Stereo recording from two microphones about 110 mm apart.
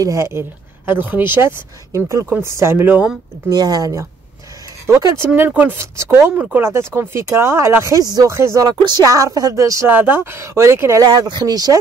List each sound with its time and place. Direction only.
0.0 s speech: 25° right (ahead or behind)
3.4 s speech: 35° right (ahead or behind)
9.8 s speech: 15° right (ahead or behind)
11.1 s speech: 40° right (ahead or behind)